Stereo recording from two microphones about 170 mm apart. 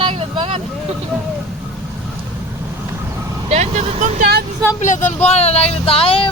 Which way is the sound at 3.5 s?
40° right (ahead or behind).